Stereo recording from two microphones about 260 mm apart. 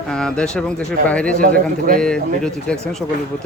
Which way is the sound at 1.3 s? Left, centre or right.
Right.